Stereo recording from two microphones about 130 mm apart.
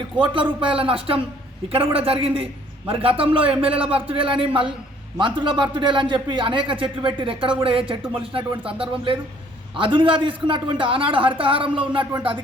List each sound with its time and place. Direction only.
0.6 s a man's voice: 45° right (ahead or behind)